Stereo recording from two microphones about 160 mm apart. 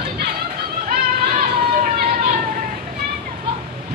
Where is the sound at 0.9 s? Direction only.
60° right (ahead or behind).